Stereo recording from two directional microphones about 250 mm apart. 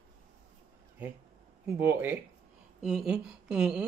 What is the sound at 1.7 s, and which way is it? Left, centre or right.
A woman's voice, centre.